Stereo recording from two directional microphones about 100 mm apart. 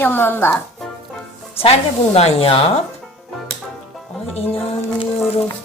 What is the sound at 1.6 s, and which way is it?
Speech, 90° left.